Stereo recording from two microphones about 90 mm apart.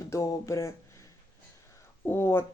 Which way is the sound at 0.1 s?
35° left (ahead or behind).